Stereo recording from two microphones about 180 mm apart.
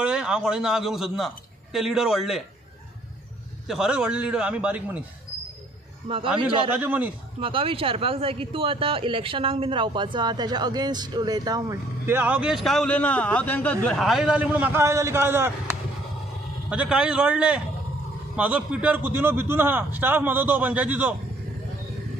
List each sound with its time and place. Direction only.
0.0 s a man's voice: 5° right (ahead or behind)
3.6 s a man's voice: centre (ahead or behind)
6.0 s a man's voice: 30° right (ahead or behind)
6.8 s a man's voice: 10° right (ahead or behind)
7.3 s a man's voice: 30° right (ahead or behind); by 15.5 s 15° right (ahead or behind)
16.6 s a man's voice: 5° right (ahead or behind)